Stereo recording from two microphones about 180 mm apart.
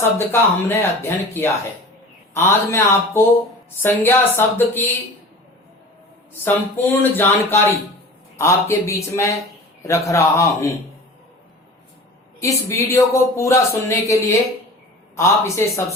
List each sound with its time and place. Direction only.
0.0 s speech: 15° left (ahead or behind)
6.4 s speech: 10° left (ahead or behind)
12.4 s speech: 15° left (ahead or behind)